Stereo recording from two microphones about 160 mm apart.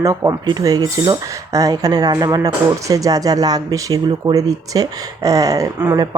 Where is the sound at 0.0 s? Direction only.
20° right (ahead or behind).